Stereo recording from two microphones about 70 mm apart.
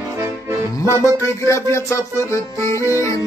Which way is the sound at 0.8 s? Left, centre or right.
Left.